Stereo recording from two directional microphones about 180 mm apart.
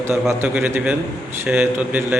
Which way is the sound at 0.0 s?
15° right (ahead or behind).